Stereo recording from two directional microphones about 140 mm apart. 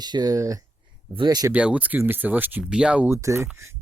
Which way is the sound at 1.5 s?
10° right (ahead or behind).